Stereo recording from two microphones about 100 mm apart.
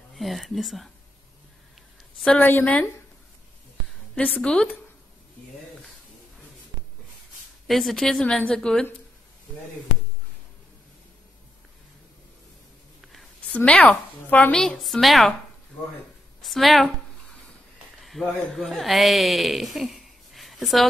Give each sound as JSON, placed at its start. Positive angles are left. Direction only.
{"t": 0.1, "sound": "speech", "side_deg": 0}
{"t": 2.1, "sound": "a woman's voice", "side_deg": 10}
{"t": 4.1, "sound": "a woman's voice", "side_deg": 10}
{"t": 7.6, "sound": "a woman's voice", "side_deg": 0}
{"t": 13.0, "sound": "a sound", "side_deg": 0}
{"t": 13.7, "sound": "a woman's voice", "side_deg": 10}
{"t": 16.4, "sound": "a woman's voice", "side_deg": 0}
{"t": 18.0, "sound": "speech", "side_deg": 0}